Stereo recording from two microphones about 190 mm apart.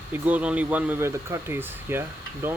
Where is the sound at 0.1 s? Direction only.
10° right (ahead or behind).